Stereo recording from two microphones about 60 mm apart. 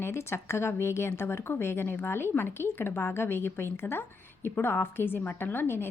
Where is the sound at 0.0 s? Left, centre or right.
Left.